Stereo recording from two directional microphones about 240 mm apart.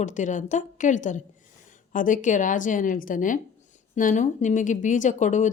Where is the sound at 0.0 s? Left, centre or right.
Left.